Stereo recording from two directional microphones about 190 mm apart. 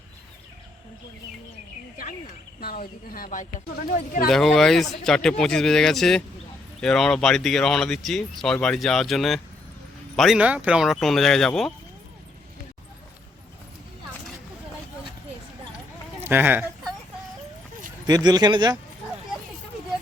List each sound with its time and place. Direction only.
2.6 s speech: 50° left (ahead or behind)
4.3 s speech: centre (ahead or behind)
16.2 s speech: 10° right (ahead or behind)
18.0 s speech: 20° right (ahead or behind)